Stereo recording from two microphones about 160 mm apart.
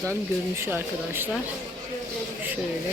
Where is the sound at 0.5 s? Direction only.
15° right (ahead or behind).